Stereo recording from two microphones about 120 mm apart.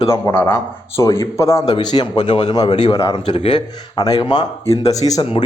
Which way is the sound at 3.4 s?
50° left (ahead or behind).